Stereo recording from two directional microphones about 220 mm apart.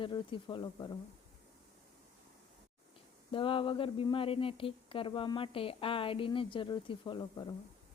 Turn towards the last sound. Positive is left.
turn(degrees=20)  # may be behind; listen again after turning